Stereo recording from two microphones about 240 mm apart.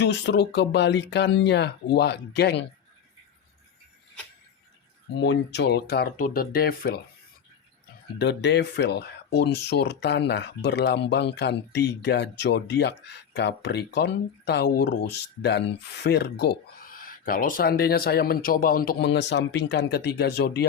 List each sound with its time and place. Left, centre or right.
0.0 s speech: left
5.1 s speech: left
8.2 s speech: left